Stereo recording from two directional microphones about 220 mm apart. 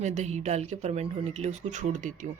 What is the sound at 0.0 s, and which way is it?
Speech, 30° right (ahead or behind).